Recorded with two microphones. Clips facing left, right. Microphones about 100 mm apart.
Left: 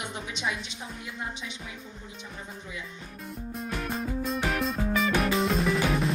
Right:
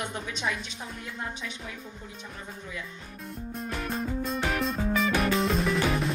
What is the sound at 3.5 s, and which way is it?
Music, centre (ahead or behind).